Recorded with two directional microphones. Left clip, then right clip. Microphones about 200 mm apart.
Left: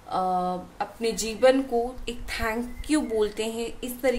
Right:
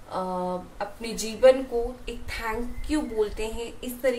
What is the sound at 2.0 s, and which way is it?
A woman's voice, 55° left (ahead or behind).